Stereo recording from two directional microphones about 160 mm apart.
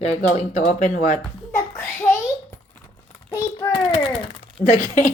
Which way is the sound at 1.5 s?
15° left (ahead or behind).